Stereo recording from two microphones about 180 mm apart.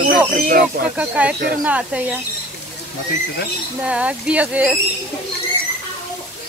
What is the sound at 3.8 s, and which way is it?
Speech, 5° right (ahead or behind).